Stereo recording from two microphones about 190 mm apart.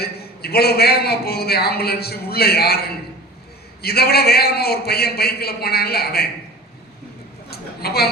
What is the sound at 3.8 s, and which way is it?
A man's voice, 55° left (ahead or behind).